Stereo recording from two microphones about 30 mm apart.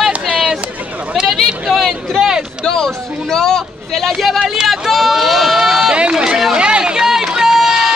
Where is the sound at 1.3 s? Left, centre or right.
Centre.